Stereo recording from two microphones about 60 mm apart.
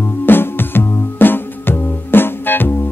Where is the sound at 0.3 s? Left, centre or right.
Left.